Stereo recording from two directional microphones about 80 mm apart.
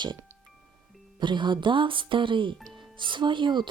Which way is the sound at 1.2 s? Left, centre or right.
Right.